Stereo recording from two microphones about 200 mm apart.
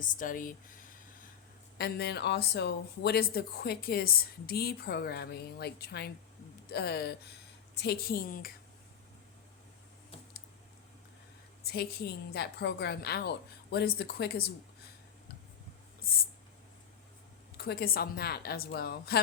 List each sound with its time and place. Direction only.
0.0 s speech: 40° left (ahead or behind)
1.8 s speech: 55° left (ahead or behind)
11.6 s speech: 50° left (ahead or behind)
16.0 s a sound: 50° left (ahead or behind)
17.6 s speech: 50° left (ahead or behind)